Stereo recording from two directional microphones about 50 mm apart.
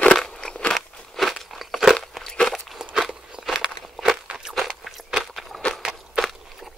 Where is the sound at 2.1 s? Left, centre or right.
Centre.